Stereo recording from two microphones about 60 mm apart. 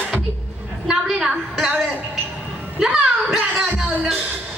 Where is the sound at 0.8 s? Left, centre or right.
Centre.